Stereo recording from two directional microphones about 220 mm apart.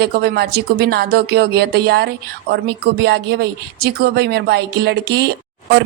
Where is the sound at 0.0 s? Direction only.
45° right (ahead or behind).